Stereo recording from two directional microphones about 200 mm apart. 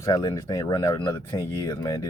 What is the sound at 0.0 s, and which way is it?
Speech, 20° left (ahead or behind).